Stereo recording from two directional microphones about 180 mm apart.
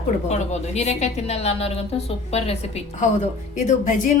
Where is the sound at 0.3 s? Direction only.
40° left (ahead or behind).